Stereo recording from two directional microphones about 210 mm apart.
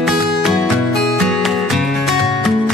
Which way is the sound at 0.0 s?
Centre (ahead or behind).